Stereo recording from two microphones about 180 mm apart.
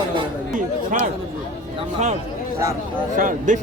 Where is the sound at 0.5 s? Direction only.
45° right (ahead or behind).